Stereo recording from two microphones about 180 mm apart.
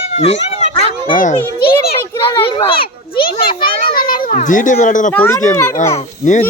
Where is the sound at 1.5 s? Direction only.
60° left (ahead or behind).